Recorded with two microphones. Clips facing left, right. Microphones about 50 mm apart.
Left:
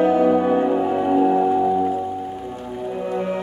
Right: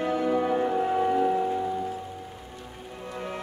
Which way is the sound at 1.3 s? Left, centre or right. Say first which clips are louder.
Left 9 dB; left.